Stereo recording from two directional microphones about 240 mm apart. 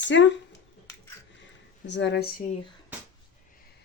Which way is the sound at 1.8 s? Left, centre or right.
Left.